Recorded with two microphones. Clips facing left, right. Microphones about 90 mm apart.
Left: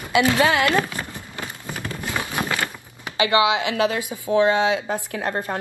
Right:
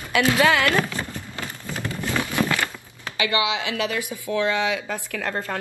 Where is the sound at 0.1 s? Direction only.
25° left (ahead or behind).